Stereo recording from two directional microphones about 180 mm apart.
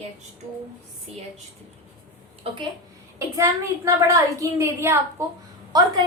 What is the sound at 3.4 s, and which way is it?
A woman's voice, 15° right (ahead or behind).